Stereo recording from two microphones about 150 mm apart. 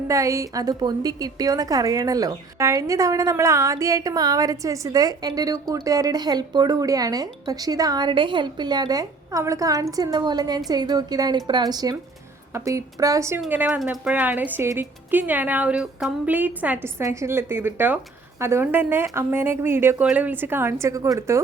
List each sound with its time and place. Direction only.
0.1 s a woman's voice: 20° right (ahead or behind)